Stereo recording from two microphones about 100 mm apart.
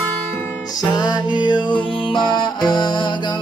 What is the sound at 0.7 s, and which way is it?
Music, 45° left (ahead or behind).